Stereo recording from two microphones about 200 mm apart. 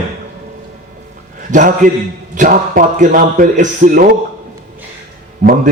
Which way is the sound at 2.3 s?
40° right (ahead or behind).